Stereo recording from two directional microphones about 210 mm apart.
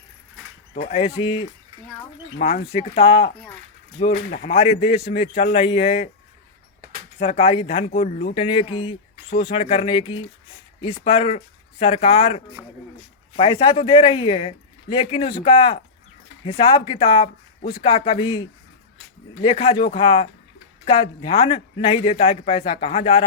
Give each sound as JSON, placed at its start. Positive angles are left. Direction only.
{"t": 0.7, "sound": "a man's voice", "side_deg": 35}
{"t": 2.4, "sound": "a man's voice", "side_deg": 35}
{"t": 7.2, "sound": "a man's voice", "side_deg": 30}
{"t": 12.6, "sound": "speech", "side_deg": -5}
{"t": 13.3, "sound": "a man's voice", "side_deg": 25}